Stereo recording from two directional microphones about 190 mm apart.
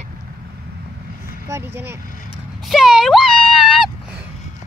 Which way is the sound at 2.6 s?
Centre (ahead or behind).